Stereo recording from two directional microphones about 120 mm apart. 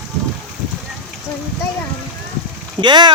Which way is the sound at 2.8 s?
40° right (ahead or behind).